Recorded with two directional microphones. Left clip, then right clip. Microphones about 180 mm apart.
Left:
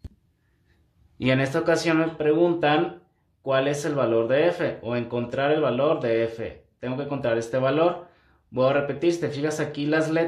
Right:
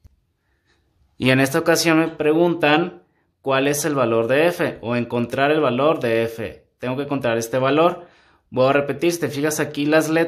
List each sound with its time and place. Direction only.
1.1 s speech: 40° right (ahead or behind)